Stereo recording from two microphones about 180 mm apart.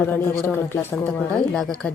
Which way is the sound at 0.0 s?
10° left (ahead or behind).